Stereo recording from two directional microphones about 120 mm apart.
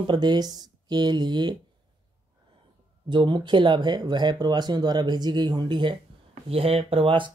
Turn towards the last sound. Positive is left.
turn(degrees=-45)  # may be behind; listen again after turning